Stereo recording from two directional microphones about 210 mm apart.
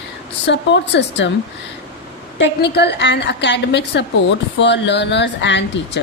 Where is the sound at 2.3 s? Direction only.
55° left (ahead or behind).